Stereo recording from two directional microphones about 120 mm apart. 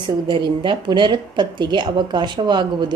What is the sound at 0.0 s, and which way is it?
A woman's voice, 40° right (ahead or behind).